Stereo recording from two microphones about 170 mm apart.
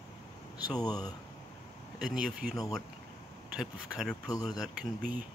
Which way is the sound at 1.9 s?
5° right (ahead or behind).